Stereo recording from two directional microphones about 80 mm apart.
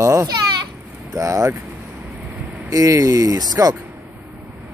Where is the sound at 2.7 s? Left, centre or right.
Right.